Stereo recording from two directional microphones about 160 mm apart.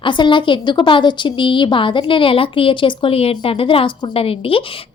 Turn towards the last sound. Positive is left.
turn(degrees=35)  # may be behind; listen again after turning